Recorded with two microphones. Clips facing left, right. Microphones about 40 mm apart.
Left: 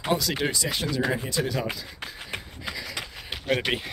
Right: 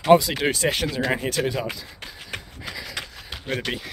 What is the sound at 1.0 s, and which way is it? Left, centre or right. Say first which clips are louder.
Speech: right 3 dB; right.